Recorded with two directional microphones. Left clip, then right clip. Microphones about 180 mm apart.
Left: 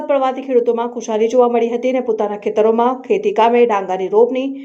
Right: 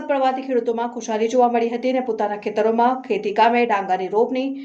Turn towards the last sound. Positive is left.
turn(degrees=15)  # may be behind; listen again after turning